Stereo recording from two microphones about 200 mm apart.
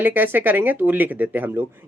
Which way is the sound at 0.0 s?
10° right (ahead or behind).